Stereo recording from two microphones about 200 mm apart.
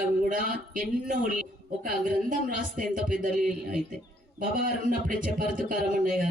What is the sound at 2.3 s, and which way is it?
A man's voice, 40° right (ahead or behind).